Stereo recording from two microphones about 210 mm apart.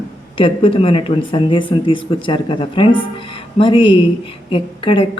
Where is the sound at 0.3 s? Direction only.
25° left (ahead or behind).